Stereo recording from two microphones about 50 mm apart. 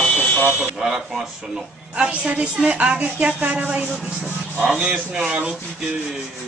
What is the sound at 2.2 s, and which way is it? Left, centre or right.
Speech, right.